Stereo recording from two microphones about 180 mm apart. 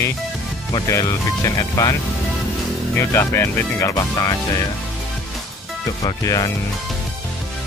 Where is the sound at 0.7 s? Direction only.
15° left (ahead or behind).